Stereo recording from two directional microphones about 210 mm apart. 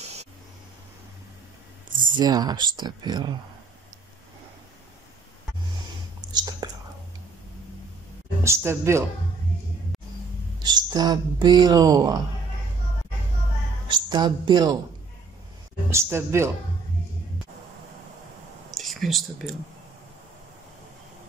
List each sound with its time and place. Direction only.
2.1 s speech: 20° right (ahead or behind)
6.3 s whispering: 20° right (ahead or behind)
8.5 s speech: 10° right (ahead or behind)
10.6 s a woman's voice: 20° right (ahead or behind)
13.8 s speech: 20° right (ahead or behind)
15.9 s speech: 10° right (ahead or behind)
18.7 s a sound: centre (ahead or behind)